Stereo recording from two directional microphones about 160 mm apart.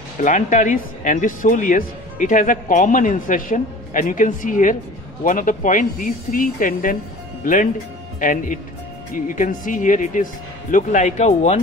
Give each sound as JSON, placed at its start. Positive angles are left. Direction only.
{"t": 0.2, "sound": "speech", "side_deg": 55}